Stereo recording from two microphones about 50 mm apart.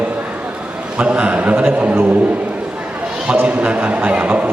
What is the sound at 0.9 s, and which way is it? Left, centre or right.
Speech, right.